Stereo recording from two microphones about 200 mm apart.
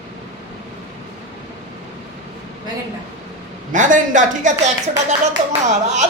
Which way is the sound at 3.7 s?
40° right (ahead or behind).